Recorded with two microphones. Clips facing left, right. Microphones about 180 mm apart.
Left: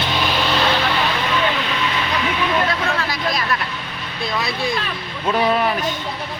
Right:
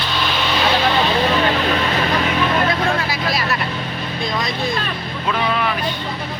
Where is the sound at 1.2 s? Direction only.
35° right (ahead or behind).